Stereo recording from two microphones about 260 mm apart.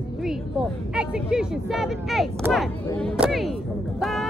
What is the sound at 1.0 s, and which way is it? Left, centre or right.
Speech, centre.